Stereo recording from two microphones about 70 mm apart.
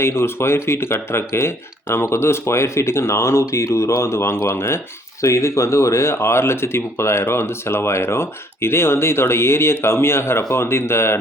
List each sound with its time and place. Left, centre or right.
0.0 s speech: left